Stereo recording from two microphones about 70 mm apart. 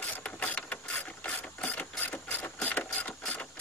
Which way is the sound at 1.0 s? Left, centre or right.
Centre.